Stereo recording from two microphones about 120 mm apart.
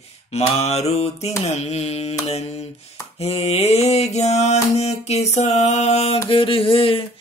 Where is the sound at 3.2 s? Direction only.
55° left (ahead or behind).